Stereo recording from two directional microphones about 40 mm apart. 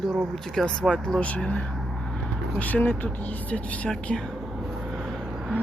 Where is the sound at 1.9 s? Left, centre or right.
Centre.